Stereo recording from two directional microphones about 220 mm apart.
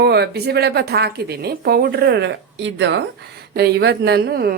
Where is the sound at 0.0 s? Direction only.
45° right (ahead or behind).